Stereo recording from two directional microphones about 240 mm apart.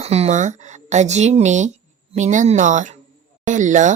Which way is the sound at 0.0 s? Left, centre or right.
Right.